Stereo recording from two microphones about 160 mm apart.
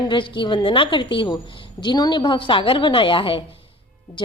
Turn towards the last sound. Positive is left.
turn(degrees=35)  # may be behind; listen again after turning